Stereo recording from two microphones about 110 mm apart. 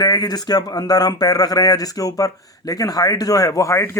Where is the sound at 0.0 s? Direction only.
35° left (ahead or behind).